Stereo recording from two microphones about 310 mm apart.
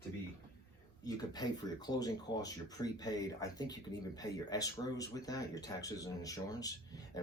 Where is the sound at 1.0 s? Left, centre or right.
Centre.